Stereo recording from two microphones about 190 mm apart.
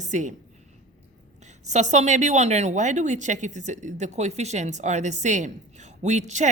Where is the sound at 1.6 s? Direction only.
35° right (ahead or behind).